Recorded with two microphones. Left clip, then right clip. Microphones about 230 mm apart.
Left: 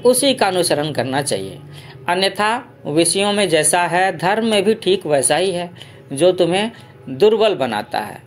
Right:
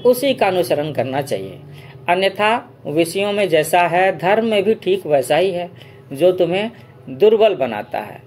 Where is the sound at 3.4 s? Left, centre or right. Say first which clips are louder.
Right 5 dB; left.